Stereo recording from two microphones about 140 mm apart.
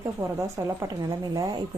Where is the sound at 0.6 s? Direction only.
25° right (ahead or behind).